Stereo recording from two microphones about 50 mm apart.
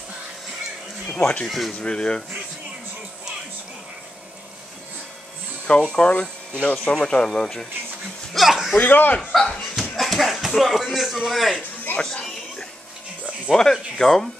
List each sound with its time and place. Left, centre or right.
1.0 s a sound: centre
1.5 s speech: centre
1.8 s speech: centre
5.7 s speech: centre
8.4 s a sound: centre
8.7 s speech: left
9.3 s a man's voice: centre
12.0 s music: centre
13.6 s speech: centre